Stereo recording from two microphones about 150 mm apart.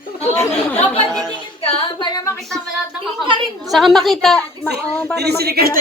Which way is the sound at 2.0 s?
20° left (ahead or behind).